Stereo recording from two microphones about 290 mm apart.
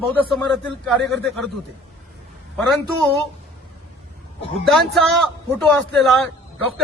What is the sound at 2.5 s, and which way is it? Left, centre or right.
Speech, centre.